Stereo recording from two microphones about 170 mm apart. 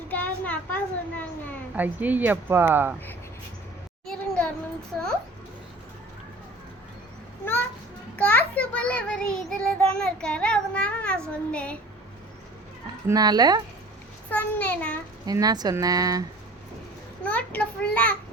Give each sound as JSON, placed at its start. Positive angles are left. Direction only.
{"t": 0.1, "sound": "a child's voice", "side_deg": 10}
{"t": 1.7, "sound": "speech", "side_deg": -10}
{"t": 4.0, "sound": "a sound", "side_deg": 5}
{"t": 8.1, "sound": "a child's voice", "side_deg": 10}
{"t": 13.1, "sound": "speech", "side_deg": -20}
{"t": 14.3, "sound": "a child's voice", "side_deg": 10}
{"t": 15.3, "sound": "speech", "side_deg": -20}
{"t": 17.2, "sound": "a child's voice", "side_deg": 10}